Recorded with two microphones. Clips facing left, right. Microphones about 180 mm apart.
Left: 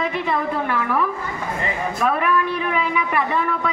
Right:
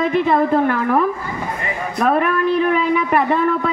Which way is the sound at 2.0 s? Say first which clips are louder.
Right 4 dB; 45° right (ahead or behind).